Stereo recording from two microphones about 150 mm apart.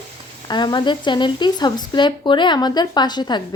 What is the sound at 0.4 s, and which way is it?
A woman's voice, 30° left (ahead or behind).